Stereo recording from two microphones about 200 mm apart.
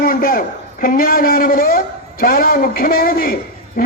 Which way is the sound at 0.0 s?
45° left (ahead or behind).